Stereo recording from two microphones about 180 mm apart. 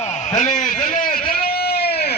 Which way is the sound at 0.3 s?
45° left (ahead or behind).